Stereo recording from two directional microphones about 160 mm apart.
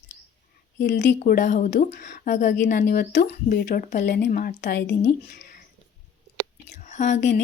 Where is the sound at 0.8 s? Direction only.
90° left.